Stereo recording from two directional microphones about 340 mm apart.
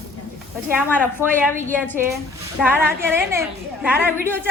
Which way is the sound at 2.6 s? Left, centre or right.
Centre.